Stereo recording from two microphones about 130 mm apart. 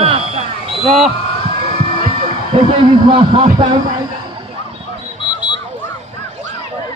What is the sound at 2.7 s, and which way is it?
Speech, 35° right (ahead or behind).